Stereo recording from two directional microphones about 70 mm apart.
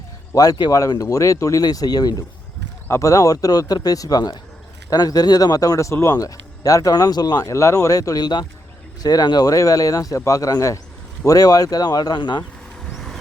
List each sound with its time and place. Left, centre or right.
0.3 s speech: left
1.6 s speech: left
3.0 s a man's voice: left
7.4 s speech: left
9.0 s speech: left
9.5 s a man's voice: left